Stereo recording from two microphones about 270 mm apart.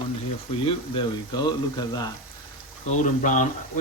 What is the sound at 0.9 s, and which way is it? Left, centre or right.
Speech, centre.